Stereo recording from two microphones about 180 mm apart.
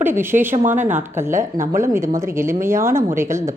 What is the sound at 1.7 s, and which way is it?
A woman's voice, 15° right (ahead or behind).